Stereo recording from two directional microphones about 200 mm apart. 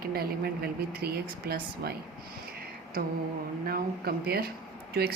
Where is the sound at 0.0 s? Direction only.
50° right (ahead or behind).